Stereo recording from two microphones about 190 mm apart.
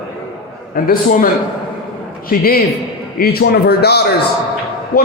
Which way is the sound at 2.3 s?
50° left (ahead or behind).